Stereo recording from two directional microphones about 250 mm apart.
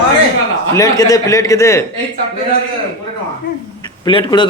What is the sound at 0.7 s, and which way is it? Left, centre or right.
Speech, centre.